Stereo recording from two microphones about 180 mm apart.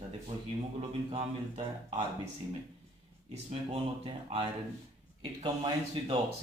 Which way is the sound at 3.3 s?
35° right (ahead or behind).